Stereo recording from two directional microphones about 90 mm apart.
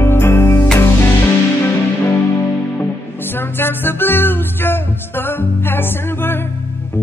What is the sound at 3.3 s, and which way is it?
Music, 25° left (ahead or behind).